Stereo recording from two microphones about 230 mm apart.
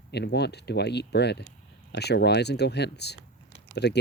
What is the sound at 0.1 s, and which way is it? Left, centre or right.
Speech, left.